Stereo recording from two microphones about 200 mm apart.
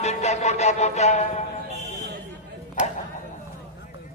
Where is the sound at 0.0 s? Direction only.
35° left (ahead or behind).